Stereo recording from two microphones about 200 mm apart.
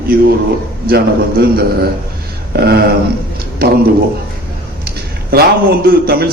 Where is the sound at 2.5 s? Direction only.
50° right (ahead or behind).